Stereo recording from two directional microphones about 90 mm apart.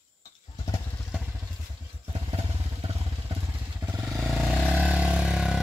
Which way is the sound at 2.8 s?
90° right.